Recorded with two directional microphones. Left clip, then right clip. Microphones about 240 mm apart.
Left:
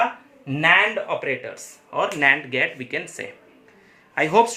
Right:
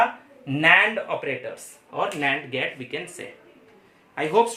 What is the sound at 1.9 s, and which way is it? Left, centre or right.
Speech, left.